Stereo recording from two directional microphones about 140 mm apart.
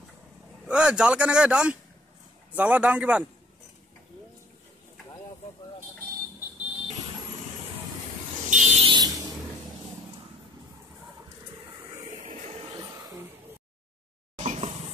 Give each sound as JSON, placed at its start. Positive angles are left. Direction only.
{"t": 0.7, "sound": "speech", "side_deg": -5}
{"t": 8.5, "sound": "buzzer", "side_deg": -60}
{"t": 8.8, "sound": "fire alarm", "side_deg": -30}
{"t": 12.1, "sound": "music", "side_deg": -60}
{"t": 12.7, "sound": "a sound", "side_deg": -25}
{"t": 14.4, "sound": "a sound", "side_deg": -50}